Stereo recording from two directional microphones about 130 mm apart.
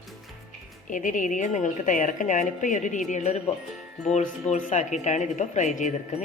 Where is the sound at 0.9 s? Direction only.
90° left; by 3.0 s 75° left (ahead or behind).